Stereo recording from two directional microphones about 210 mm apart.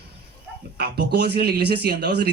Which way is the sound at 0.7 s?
50° right (ahead or behind).